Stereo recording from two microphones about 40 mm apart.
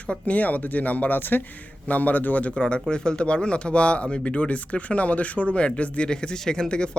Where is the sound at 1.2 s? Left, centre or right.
Left.